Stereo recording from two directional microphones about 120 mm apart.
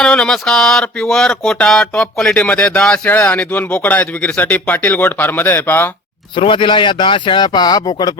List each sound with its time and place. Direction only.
0.0 s speech: 5° left (ahead or behind)
6.3 s speech: 45° left (ahead or behind)